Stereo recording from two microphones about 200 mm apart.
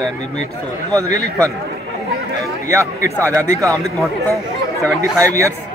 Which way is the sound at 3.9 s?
Centre (ahead or behind).